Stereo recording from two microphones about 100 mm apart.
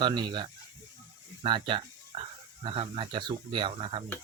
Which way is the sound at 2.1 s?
60° right (ahead or behind).